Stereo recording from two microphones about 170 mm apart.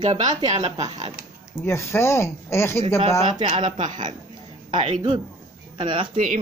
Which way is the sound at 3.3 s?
25° right (ahead or behind).